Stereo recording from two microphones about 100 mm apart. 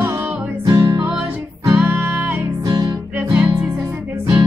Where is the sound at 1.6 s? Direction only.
30° right (ahead or behind).